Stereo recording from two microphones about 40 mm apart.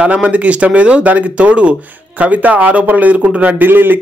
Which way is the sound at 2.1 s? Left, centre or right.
Right.